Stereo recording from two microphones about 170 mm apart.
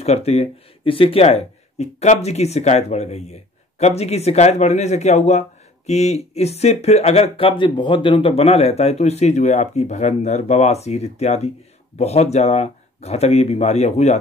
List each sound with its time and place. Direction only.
0.0 s speech: 40° left (ahead or behind)